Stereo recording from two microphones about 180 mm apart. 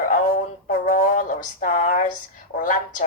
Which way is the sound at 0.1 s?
55° left (ahead or behind).